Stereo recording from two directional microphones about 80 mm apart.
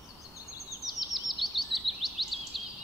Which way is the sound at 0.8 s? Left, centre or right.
Centre.